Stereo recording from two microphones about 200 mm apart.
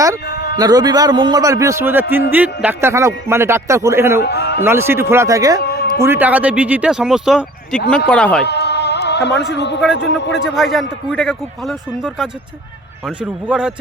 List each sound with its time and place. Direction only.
0.5 s a man's voice: 20° right (ahead or behind)
4.2 s a man's voice: 55° left (ahead or behind)
4.6 s a man's voice: 10° right (ahead or behind)
5.6 s a sound: 50° left (ahead or behind)
6.0 s a man's voice: 10° right (ahead or behind); by 8.4 s 5° left (ahead or behind)
8.4 s music: 55° left (ahead or behind)
9.5 s a man's voice: 60° left (ahead or behind)
10.4 s speech: centre (ahead or behind)